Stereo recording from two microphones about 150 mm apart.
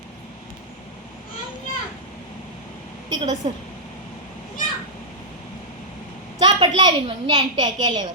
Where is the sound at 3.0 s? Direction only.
25° right (ahead or behind).